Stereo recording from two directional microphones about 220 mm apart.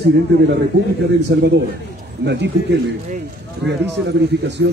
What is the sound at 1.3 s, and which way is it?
A man's voice, 50° right (ahead or behind).